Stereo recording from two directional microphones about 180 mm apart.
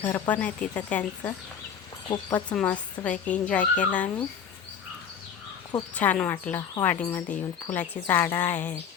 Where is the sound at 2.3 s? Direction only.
5° left (ahead or behind).